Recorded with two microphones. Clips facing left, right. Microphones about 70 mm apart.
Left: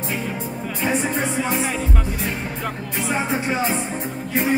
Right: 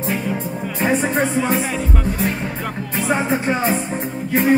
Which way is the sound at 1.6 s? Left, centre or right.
Centre.